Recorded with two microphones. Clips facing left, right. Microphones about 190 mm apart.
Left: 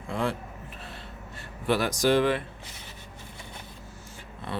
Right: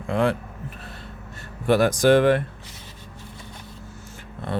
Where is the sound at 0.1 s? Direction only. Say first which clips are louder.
Right 7 dB; 65° right (ahead or behind).